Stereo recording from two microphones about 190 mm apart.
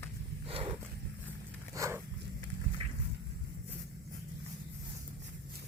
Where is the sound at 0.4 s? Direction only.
30° right (ahead or behind).